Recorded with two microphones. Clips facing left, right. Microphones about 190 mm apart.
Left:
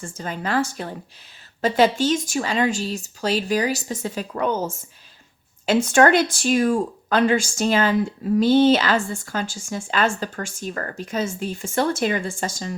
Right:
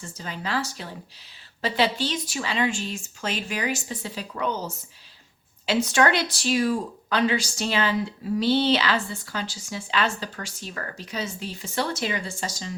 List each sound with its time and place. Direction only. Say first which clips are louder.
0.0 s speech: left 5 dB; 50° left (ahead or behind)